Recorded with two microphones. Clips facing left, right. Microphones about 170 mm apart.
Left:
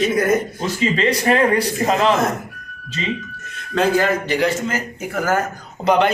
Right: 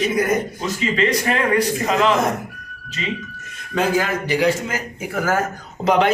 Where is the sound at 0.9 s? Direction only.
35° left (ahead or behind).